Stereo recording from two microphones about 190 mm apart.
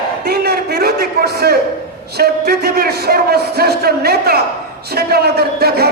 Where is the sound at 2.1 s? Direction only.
55° right (ahead or behind).